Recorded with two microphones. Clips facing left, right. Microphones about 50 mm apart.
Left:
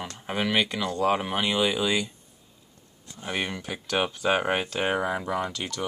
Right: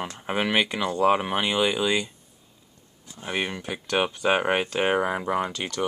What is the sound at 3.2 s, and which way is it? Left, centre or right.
Speech, centre.